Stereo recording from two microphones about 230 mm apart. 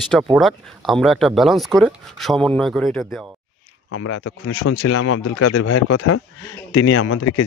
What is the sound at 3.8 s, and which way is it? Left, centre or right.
Speech, left.